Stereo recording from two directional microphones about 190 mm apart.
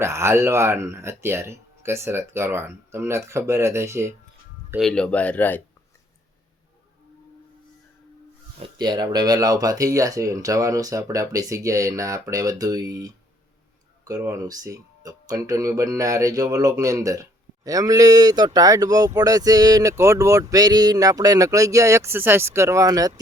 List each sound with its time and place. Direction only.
0.0 s speech: 15° right (ahead or behind)
4.8 s speech: 5° left (ahead or behind)
8.6 s speech: 20° right (ahead or behind)